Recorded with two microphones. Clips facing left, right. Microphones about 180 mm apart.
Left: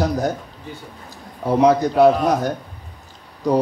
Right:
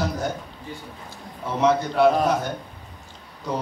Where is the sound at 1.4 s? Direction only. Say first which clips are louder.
Left 6 dB; 40° left (ahead or behind).